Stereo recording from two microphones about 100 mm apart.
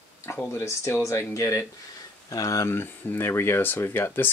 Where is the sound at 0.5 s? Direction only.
30° left (ahead or behind).